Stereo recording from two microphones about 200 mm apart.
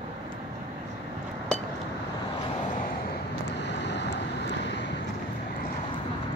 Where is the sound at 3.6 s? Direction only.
60° left (ahead or behind).